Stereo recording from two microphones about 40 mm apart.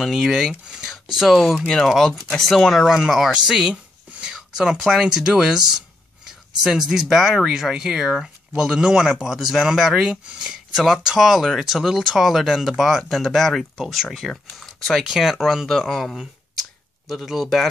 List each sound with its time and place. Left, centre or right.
0.0 s speech: centre
3.3 s speech: right
3.7 s a sound: right
4.3 s speech: centre
14.2 s speech: centre
14.6 s speech: centre
17.1 s speech: centre